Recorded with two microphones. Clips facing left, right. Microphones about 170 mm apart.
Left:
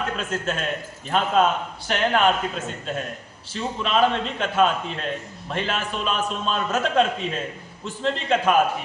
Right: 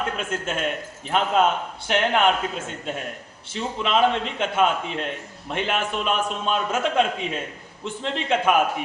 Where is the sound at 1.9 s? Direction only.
20° right (ahead or behind).